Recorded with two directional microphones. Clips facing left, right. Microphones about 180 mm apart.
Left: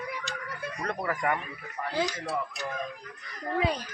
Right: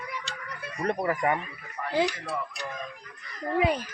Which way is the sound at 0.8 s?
25° right (ahead or behind).